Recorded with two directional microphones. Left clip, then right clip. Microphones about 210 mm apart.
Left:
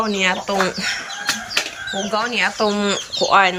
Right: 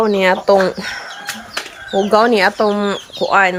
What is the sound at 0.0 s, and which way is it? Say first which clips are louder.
Speech: right 6 dB; 25° right (ahead or behind).